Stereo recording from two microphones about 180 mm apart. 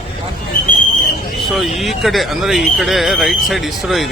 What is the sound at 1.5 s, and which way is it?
Speech, centre (ahead or behind).